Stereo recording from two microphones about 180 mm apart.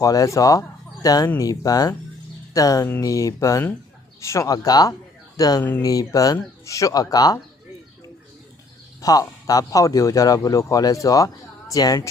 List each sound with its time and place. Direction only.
0.0 s speech: 20° left (ahead or behind)
9.0 s speech: 20° left (ahead or behind)